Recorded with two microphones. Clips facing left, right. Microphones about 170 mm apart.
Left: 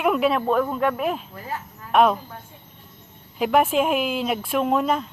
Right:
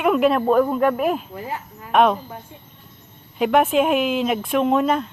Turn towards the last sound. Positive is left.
turn(degrees=0)  # may be behind; listen again after turning